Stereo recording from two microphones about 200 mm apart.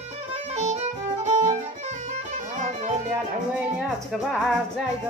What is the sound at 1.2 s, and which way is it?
Violin, 35° right (ahead or behind).